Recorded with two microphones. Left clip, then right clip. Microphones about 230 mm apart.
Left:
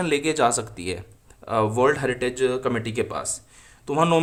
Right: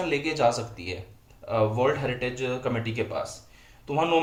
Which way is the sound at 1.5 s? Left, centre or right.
Left.